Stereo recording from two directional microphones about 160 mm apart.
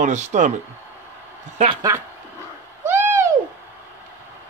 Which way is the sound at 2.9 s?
15° right (ahead or behind).